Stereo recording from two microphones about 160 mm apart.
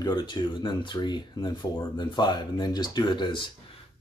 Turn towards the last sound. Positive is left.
turn(degrees=30)  # may be behind; listen again after turning